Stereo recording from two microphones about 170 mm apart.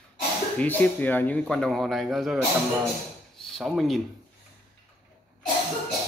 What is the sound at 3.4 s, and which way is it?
Speech, centre (ahead or behind).